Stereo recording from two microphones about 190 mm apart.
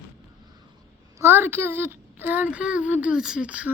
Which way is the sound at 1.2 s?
10° right (ahead or behind).